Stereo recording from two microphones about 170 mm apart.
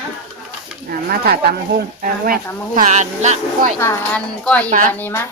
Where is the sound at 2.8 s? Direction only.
45° right (ahead or behind).